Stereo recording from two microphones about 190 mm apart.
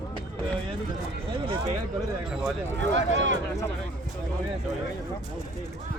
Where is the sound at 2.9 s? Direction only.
75° right (ahead or behind).